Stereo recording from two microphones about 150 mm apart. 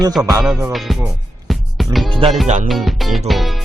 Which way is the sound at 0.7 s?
Centre (ahead or behind).